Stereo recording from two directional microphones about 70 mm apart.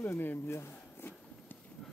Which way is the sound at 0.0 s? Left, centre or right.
Left.